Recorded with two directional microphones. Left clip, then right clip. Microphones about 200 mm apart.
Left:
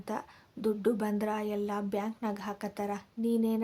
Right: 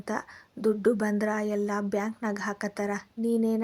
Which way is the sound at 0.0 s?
15° right (ahead or behind).